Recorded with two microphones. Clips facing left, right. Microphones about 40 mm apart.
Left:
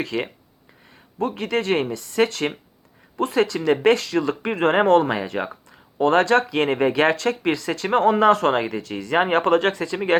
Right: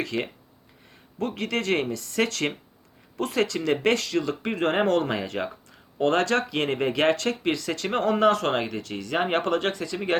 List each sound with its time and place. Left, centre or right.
1.4 s speech: left